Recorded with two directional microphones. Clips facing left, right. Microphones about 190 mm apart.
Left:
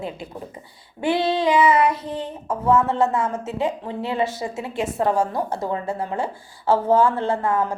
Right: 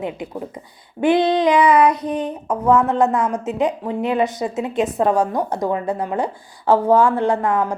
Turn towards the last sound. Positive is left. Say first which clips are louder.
# right 3 dB
turn(degrees=-15)  # may be behind; listen again after turning